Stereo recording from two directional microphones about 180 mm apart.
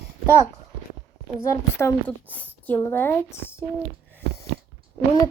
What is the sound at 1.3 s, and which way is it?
A woman's voice, 15° left (ahead or behind).